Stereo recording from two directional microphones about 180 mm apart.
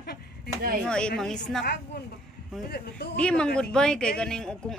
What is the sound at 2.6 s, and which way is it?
Speech, 60° left (ahead or behind).